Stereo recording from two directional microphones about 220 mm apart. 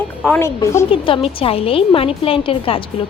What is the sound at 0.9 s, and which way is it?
A woman's voice, 25° left (ahead or behind).